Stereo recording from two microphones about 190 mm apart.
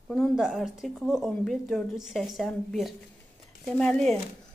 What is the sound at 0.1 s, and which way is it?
A woman's voice, centre (ahead or behind).